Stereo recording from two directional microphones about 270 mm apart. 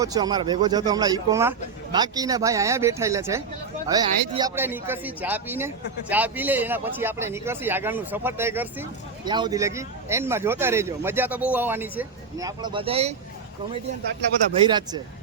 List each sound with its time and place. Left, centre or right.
0.0 s speech: centre
14.6 s speech: centre